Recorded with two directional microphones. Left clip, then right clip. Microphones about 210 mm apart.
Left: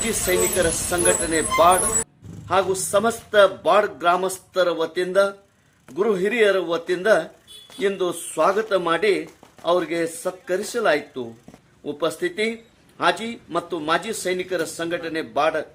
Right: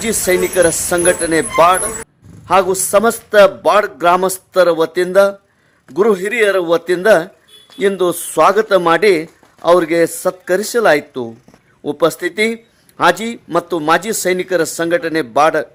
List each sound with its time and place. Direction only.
0.0 s a man's voice: 40° right (ahead or behind)